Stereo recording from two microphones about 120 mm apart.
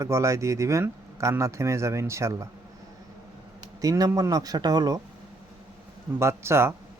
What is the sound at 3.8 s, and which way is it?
Speech, 30° right (ahead or behind).